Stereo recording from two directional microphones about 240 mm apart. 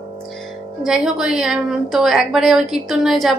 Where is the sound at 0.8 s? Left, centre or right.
Centre.